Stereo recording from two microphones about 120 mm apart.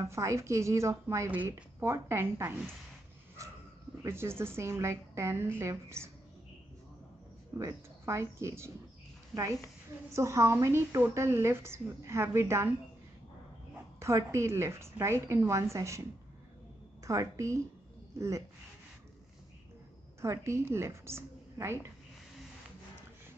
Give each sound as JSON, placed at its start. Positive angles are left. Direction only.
{"t": 0.0, "sound": "a woman's voice", "side_deg": -25}
{"t": 4.0, "sound": "a woman's voice", "side_deg": -20}
{"t": 7.5, "sound": "a woman's voice", "side_deg": -25}
{"t": 10.1, "sound": "a woman's voice", "side_deg": -25}
{"t": 13.9, "sound": "a woman's voice", "side_deg": -25}
{"t": 17.0, "sound": "a woman's voice", "side_deg": -25}
{"t": 20.2, "sound": "a woman's voice", "side_deg": -25}